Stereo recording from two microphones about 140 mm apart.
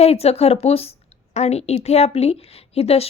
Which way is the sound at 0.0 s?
45° left (ahead or behind).